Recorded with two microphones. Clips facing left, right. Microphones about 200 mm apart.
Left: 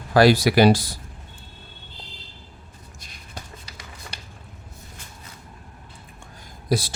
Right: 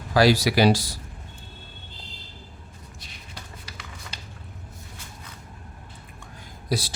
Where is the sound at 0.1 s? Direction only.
55° left (ahead or behind).